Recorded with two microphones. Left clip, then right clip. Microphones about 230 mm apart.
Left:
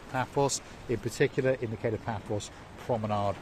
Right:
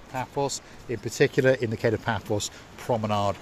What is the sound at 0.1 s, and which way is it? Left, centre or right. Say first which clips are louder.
Speech: even; centre.